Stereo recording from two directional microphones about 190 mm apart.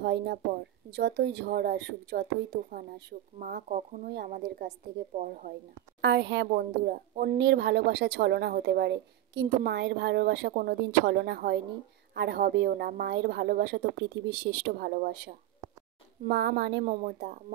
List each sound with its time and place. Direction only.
0.0 s speech: 65° right (ahead or behind)
3.6 s speech: 40° right (ahead or behind)
4.1 s speech: 55° right (ahead or behind)
5.9 s speech: 65° right (ahead or behind)
16.9 s speech: 50° right (ahead or behind)